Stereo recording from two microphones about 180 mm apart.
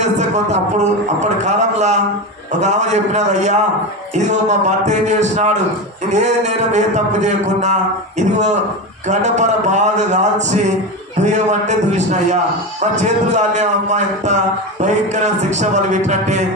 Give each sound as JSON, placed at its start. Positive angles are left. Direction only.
{"t": 0.0, "sound": "a man's voice", "side_deg": -40}